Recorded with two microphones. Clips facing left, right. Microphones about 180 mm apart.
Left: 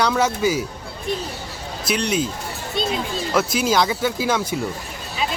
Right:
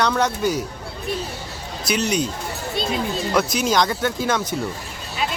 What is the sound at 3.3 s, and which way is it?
Speech, 5° left (ahead or behind).